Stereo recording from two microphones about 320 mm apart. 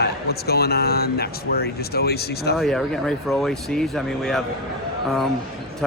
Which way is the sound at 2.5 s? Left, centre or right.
Centre.